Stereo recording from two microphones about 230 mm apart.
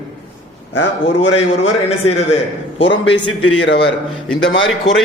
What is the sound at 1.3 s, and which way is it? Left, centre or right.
Speech, left.